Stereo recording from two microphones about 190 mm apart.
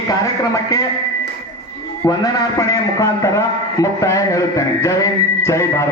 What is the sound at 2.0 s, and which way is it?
A man's voice, 20° left (ahead or behind).